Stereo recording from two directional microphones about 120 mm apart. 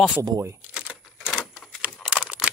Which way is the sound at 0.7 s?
10° right (ahead or behind).